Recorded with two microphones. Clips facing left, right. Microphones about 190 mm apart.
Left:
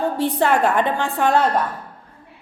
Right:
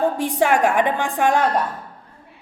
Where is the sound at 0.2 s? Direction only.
10° right (ahead or behind).